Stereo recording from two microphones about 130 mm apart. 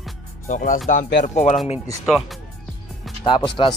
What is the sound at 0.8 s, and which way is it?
Speech, 80° left.